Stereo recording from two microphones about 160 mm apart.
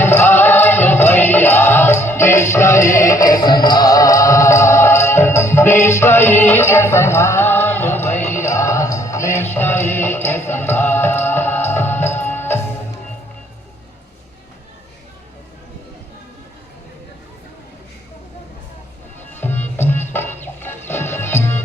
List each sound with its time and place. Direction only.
0.0 s music: 15° left (ahead or behind)
8.1 s music: 45° left (ahead or behind)
8.4 s music: 15° left (ahead or behind)
19.3 s music: 15° left (ahead or behind)